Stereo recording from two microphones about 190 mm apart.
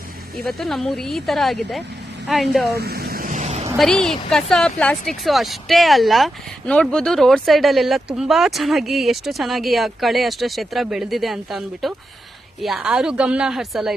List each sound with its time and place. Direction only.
0.4 s speech: centre (ahead or behind)
2.7 s a sound: 55° right (ahead or behind); by 3.7 s 35° right (ahead or behind)
3.8 s speech: 5° left (ahead or behind)